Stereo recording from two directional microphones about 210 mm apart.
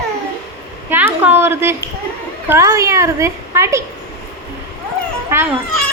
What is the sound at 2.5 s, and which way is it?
A woman's voice, 15° right (ahead or behind).